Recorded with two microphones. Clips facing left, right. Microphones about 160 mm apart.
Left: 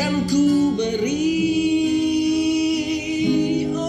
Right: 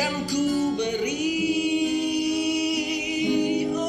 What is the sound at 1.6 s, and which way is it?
A capella, 10° right (ahead or behind).